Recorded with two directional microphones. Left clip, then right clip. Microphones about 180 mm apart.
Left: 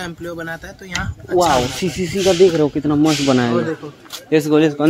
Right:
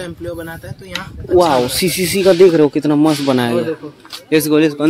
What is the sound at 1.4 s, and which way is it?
Speech, 25° right (ahead or behind).